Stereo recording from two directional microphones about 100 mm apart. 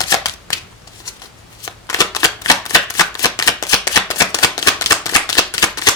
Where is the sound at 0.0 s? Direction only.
40° left (ahead or behind).